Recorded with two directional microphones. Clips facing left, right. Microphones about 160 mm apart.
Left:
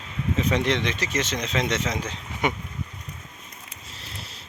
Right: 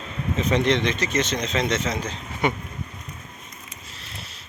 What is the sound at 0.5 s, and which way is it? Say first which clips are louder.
Speech: right 7 dB; 10° left (ahead or behind).